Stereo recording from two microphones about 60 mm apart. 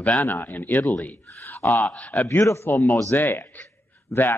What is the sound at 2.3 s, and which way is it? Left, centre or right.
Speech, left.